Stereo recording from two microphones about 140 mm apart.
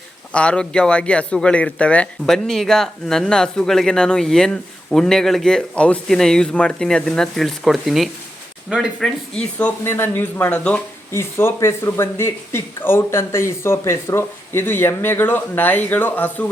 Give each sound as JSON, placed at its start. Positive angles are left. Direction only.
{"t": 0.3, "sound": "speech", "side_deg": 5}
{"t": 9.4, "sound": "speech", "side_deg": 10}
{"t": 11.1, "sound": "speech", "side_deg": 20}